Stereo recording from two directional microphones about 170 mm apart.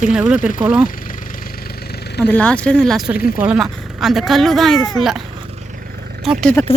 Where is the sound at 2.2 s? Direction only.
10° left (ahead or behind).